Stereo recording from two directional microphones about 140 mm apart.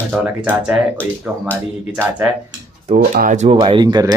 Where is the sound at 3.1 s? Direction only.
60° right (ahead or behind).